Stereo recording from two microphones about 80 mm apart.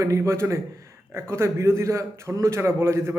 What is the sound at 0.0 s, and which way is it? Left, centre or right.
A man's voice, right.